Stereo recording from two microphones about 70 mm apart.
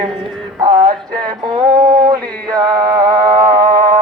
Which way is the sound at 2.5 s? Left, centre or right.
Right.